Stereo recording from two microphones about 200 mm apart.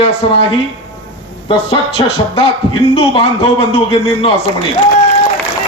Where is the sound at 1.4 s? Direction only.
25° left (ahead or behind).